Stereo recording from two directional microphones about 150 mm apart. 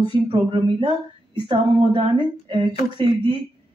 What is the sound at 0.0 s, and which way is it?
Speech, 30° right (ahead or behind).